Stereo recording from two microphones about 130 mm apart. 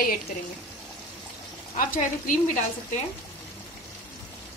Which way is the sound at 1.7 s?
90° left.